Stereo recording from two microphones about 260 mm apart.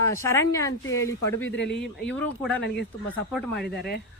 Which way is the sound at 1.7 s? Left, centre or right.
Centre.